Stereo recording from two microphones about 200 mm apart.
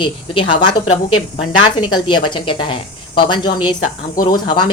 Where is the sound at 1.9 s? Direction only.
25° left (ahead or behind).